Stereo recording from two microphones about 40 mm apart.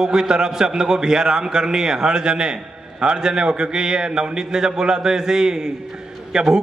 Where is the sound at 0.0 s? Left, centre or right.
Centre.